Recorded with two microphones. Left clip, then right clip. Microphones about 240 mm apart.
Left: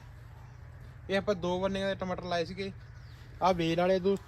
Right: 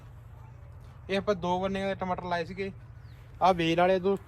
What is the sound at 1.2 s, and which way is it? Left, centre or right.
Speech, right.